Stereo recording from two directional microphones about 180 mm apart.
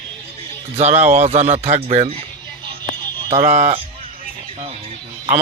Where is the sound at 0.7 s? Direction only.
40° right (ahead or behind).